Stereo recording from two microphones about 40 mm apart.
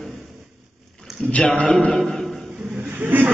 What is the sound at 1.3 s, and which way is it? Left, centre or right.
Speech, left.